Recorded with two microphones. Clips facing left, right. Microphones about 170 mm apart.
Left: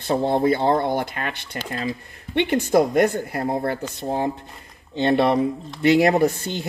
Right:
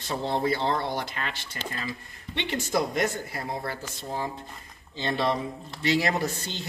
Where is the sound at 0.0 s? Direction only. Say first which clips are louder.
Left 8 dB; 55° left (ahead or behind).